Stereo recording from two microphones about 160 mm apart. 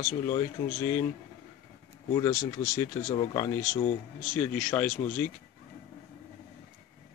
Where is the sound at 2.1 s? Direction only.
20° left (ahead or behind).